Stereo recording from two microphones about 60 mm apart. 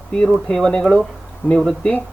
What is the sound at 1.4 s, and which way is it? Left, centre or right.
Speech, left.